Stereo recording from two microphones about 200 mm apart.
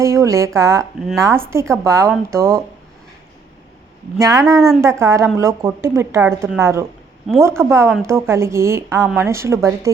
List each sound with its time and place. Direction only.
0.0 s a woman's voice: 15° right (ahead or behind)
4.2 s a woman's voice: 15° right (ahead or behind)